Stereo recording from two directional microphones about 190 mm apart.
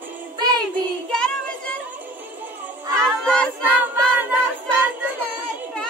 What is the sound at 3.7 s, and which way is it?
Music, 10° right (ahead or behind).